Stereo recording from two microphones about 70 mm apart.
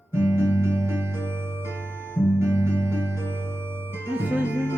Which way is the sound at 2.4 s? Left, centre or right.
Right.